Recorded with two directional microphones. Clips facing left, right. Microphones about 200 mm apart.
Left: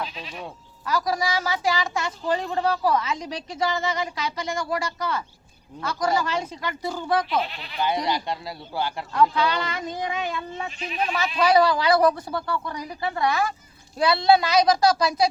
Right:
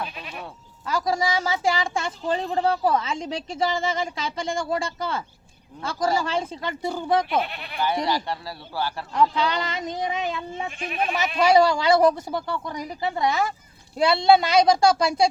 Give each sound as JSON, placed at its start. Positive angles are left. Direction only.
{"t": 0.2, "sound": "speech", "side_deg": -55}
{"t": 0.9, "sound": "speech", "side_deg": -25}
{"t": 7.3, "sound": "speech", "side_deg": -55}
{"t": 7.8, "sound": "speech", "side_deg": 15}
{"t": 9.1, "sound": "speech", "side_deg": -20}
{"t": 10.5, "sound": "speech", "side_deg": -50}
{"t": 11.4, "sound": "speech", "side_deg": -25}